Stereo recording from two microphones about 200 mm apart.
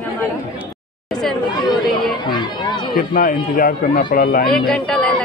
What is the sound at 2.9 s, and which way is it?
Speech, 45° left (ahead or behind).